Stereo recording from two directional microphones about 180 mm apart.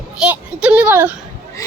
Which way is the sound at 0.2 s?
5° right (ahead or behind).